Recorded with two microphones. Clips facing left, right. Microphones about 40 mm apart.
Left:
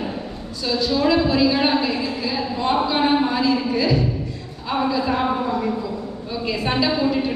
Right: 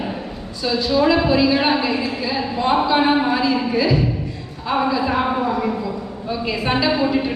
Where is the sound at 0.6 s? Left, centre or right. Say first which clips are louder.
Right 3 dB; centre.